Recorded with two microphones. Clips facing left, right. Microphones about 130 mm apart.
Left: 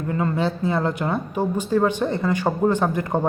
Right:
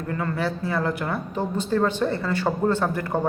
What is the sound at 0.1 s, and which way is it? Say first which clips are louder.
A woman's voice: left 3 dB; 20° left (ahead or behind).